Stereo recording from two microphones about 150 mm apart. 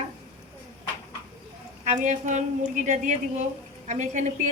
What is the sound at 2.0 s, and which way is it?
A woman's voice, 55° right (ahead or behind).